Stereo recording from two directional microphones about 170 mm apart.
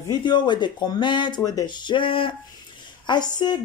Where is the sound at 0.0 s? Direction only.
25° left (ahead or behind).